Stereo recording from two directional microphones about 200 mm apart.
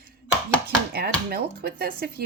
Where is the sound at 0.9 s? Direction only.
50° right (ahead or behind).